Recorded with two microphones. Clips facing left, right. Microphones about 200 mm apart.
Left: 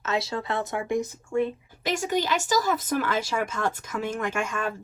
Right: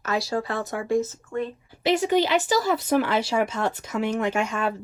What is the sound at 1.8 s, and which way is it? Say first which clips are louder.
Speech: right 6 dB; 45° left (ahead or behind).